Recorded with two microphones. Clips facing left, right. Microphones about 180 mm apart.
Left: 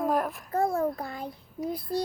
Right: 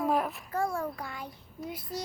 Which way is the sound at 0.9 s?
30° left (ahead or behind).